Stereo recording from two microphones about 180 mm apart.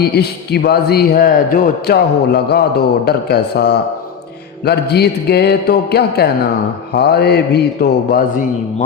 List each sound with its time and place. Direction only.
0.1 s a man's voice: 65° left (ahead or behind)